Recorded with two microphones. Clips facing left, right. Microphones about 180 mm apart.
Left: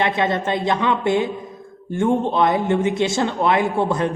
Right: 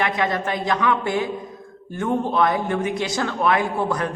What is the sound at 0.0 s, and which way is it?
A woman's voice, 25° left (ahead or behind).